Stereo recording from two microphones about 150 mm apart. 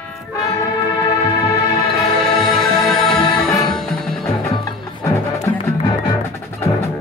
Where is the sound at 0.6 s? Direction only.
25° left (ahead or behind).